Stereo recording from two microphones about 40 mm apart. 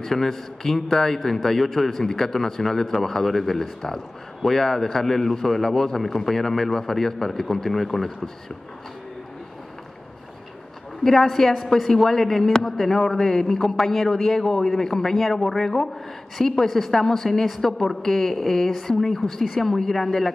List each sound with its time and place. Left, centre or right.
0.0 s a man's voice: centre
11.1 s a man's voice: centre